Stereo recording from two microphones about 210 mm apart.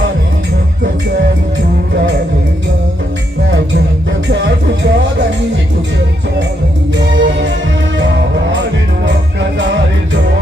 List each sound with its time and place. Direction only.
7.1 s music: 55° right (ahead or behind)